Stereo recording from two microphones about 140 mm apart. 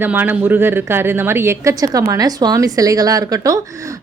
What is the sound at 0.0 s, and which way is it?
Speech, 15° right (ahead or behind).